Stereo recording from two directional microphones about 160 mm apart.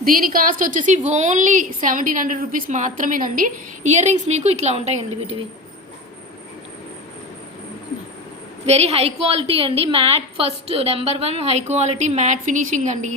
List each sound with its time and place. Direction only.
0.0 s a woman's voice: 60° right (ahead or behind); by 4.9 s 40° right (ahead or behind)
8.6 s a woman's voice: 40° right (ahead or behind)